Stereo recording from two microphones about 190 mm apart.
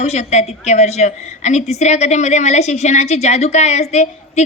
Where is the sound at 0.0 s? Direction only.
35° left (ahead or behind).